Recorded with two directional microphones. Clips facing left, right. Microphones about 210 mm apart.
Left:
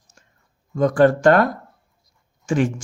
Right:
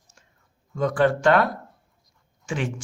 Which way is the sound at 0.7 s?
45° left (ahead or behind).